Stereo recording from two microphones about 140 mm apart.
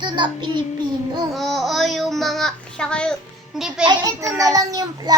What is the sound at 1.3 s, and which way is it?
A child's voice, centre (ahead or behind).